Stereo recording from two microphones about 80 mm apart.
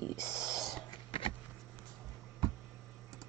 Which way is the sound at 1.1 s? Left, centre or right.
Left.